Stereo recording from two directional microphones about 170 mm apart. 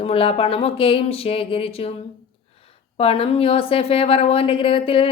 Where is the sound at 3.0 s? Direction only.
35° left (ahead or behind).